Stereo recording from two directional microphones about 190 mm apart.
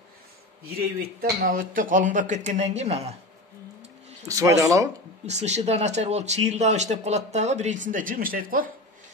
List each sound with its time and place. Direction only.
1.4 s speech: 45° right (ahead or behind)
4.3 s speech: 15° right (ahead or behind)
5.2 s speech: 35° right (ahead or behind)